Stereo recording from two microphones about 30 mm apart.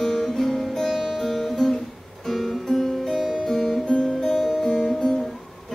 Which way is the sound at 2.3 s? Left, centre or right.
Centre.